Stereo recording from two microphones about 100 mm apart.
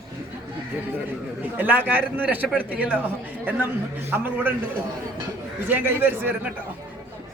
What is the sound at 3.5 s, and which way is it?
A man's voice, 20° right (ahead or behind).